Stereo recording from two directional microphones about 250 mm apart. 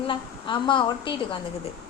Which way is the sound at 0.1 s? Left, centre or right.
Centre.